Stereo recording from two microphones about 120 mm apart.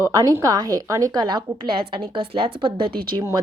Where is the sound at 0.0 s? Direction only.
30° right (ahead or behind).